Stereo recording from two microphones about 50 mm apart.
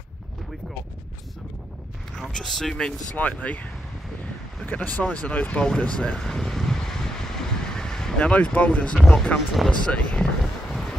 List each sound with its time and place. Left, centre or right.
2.3 s speech: centre
3.2 s speech: left
4.6 s speech: left
6.2 s vehicle: centre
8.2 s speech: left
10.7 s wind noise: centre